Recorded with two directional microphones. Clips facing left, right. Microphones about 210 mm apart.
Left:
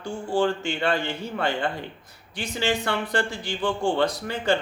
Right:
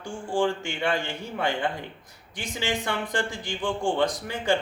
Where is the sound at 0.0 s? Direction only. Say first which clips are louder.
Left 2 dB; 15° right (ahead or behind).